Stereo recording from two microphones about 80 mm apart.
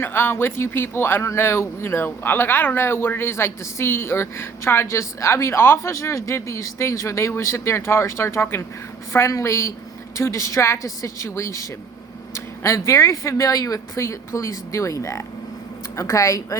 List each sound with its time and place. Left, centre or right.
0.0 s speech: left